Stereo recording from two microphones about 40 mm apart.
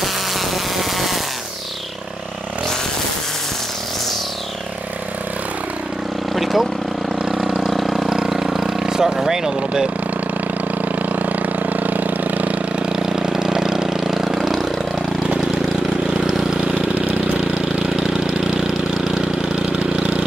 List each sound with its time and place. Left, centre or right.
0.0 s insect: centre
6.3 s vehicle: centre
11.0 s vehicle: right
12.7 s vehicle: centre
17.8 s engine: centre
19.8 s vehicle: right